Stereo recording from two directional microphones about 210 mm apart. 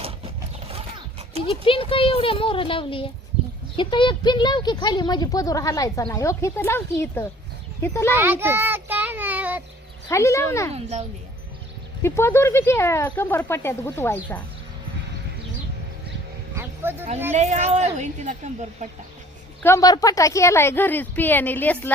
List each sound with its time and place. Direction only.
1.5 s a woman's voice: 25° left (ahead or behind)
8.1 s child singing: 10° right (ahead or behind)
10.1 s speech: 15° left (ahead or behind)
10.8 s a woman's voice: 30° right (ahead or behind)
12.0 s speech: 10° left (ahead or behind)
16.6 s a sound: 10° right (ahead or behind)
17.3 s a woman's voice: 30° right (ahead or behind)
19.6 s speech: 15° left (ahead or behind)